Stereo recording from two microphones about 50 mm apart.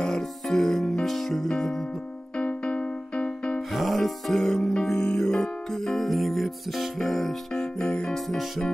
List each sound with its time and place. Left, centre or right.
0.0 s music: centre
2.3 s music: left
3.7 s music: centre